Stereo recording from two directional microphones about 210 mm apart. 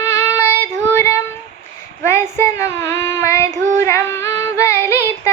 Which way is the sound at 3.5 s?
35° right (ahead or behind).